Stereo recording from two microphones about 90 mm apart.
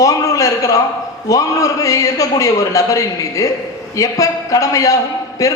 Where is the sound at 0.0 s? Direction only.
40° left (ahead or behind).